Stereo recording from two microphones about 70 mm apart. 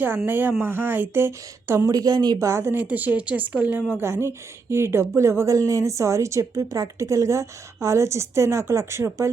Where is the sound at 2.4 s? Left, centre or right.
Right.